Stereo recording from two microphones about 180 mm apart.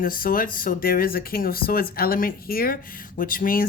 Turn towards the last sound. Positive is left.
turn(degrees=50)  # may be behind; listen again after turning